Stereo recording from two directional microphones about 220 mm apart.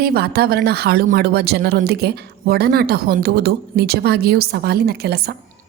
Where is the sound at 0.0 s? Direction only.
45° right (ahead or behind).